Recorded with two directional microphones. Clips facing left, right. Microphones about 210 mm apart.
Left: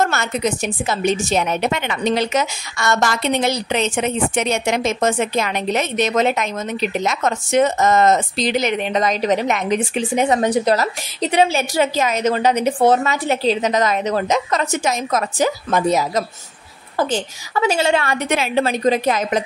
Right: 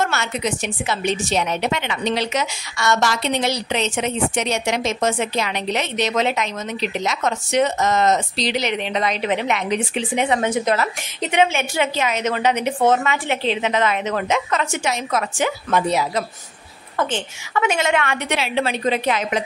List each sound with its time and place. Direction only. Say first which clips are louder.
0.0 s a woman's voice: left 3 dB; 45° left (ahead or behind)